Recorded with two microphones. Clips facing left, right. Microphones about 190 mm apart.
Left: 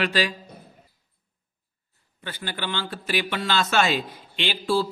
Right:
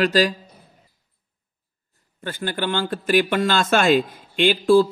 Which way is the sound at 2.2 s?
45° right (ahead or behind).